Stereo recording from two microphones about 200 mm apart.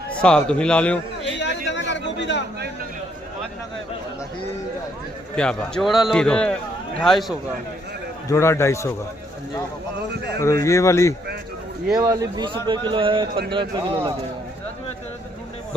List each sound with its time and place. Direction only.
0.2 s a man's voice: 5° left (ahead or behind)
1.4 s a sound: 65° left (ahead or behind)
5.4 s a man's voice: 5° left (ahead or behind)
8.3 s speech: 15° left (ahead or behind)
10.4 s speech: 15° left (ahead or behind)
11.9 s speech: 20° right (ahead or behind)